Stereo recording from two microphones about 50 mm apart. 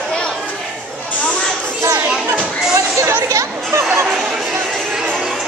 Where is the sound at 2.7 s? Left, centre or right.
Right.